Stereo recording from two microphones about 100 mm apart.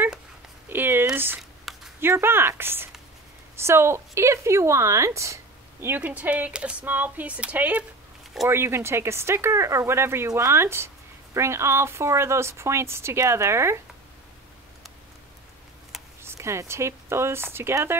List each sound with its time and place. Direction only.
0.7 s a sound: 20° right (ahead or behind)
1.1 s speech: 20° right (ahead or behind)
16.2 s speech: 25° right (ahead or behind)